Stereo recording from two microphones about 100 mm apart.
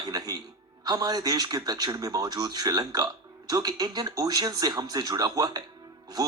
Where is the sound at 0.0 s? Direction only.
40° right (ahead or behind).